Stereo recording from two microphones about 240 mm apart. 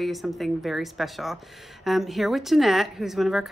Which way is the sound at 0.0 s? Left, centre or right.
Centre.